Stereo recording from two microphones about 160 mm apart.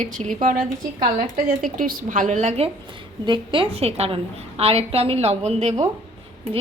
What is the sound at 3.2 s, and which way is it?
A woman's voice, 30° right (ahead or behind).